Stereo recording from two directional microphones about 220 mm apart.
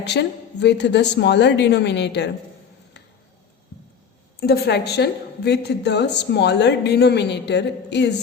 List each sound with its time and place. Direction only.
0.0 s a woman's voice: 50° left (ahead or behind)
4.4 s a woman's voice: 45° left (ahead or behind)